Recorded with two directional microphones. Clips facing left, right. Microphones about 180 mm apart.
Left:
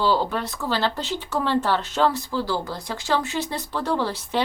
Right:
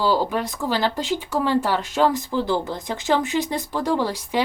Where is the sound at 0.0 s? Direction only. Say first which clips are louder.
Right 1 dB; 10° right (ahead or behind).